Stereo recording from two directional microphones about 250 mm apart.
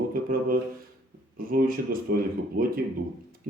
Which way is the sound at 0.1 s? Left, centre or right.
Right.